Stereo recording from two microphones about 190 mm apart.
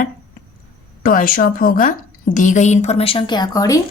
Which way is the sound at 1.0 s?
50° left (ahead or behind).